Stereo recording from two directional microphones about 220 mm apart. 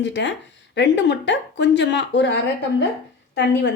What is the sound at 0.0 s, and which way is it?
Speech, 55° left (ahead or behind).